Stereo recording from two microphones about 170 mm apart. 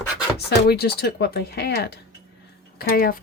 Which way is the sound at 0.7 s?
70° left (ahead or behind).